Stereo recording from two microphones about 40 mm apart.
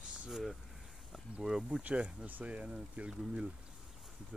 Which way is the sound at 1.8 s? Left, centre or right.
Right.